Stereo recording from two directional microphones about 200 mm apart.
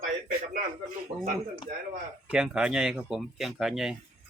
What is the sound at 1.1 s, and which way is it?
Speech, 25° right (ahead or behind).